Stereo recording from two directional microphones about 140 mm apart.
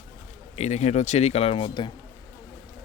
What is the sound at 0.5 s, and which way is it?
Speech, 50° left (ahead or behind).